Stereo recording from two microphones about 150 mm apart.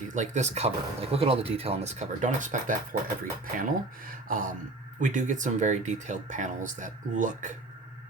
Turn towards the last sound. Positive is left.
turn(degrees=-55)  # may be behind; listen again after turning